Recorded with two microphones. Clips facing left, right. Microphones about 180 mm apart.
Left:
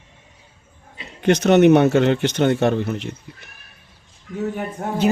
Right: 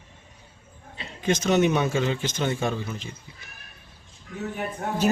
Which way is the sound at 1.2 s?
65° left (ahead or behind).